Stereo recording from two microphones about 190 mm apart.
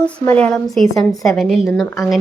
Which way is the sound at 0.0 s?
5° left (ahead or behind).